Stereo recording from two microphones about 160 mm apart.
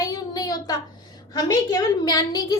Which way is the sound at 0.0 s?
25° left (ahead or behind).